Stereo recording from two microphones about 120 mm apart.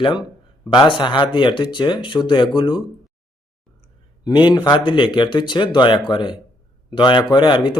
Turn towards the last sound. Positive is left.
turn(degrees=40)  # may be behind; listen again after turning